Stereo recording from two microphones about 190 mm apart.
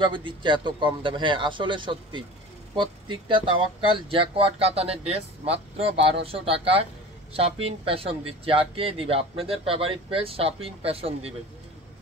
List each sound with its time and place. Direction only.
0.0 s speech: 25° right (ahead or behind)